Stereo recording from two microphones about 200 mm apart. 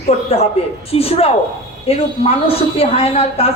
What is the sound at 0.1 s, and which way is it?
A woman's voice, 35° left (ahead or behind).